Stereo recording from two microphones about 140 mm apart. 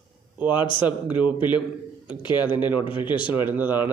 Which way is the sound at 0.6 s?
35° left (ahead or behind).